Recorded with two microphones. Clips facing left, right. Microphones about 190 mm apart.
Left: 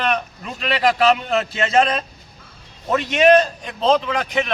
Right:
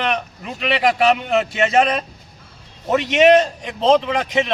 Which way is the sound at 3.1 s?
20° right (ahead or behind).